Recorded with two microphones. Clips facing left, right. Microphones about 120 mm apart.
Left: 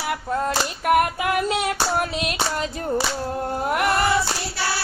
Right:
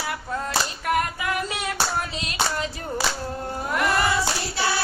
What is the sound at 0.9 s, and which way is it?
Female singing, 60° left (ahead or behind).